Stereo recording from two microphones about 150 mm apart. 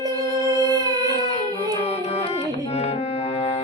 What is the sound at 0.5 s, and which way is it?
Music, 25° right (ahead or behind).